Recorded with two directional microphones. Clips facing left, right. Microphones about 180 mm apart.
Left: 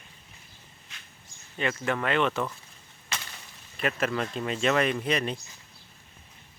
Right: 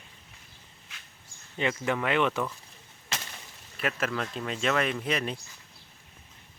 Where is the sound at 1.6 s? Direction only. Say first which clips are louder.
Even; 15° right (ahead or behind).